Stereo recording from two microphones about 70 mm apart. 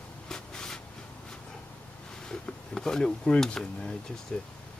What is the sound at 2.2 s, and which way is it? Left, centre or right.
Speech, centre.